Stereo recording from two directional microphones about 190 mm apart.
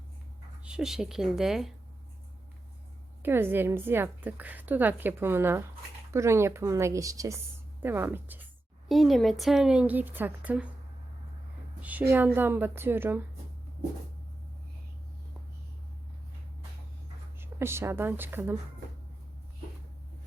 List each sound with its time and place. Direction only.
0.6 s speech: 5° right (ahead or behind)
3.2 s a woman's voice: 10° right (ahead or behind)
8.9 s speech: centre (ahead or behind)
11.8 s a woman's voice: 10° right (ahead or behind)
17.4 s a woman's voice: 15° right (ahead or behind)